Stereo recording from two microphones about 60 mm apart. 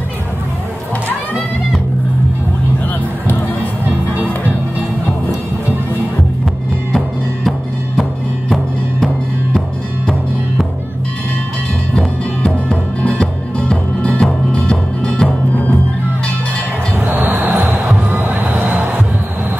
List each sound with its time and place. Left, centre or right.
3.9 s music: right
12.0 s music: centre
13.0 s music: centre
16.9 s music: right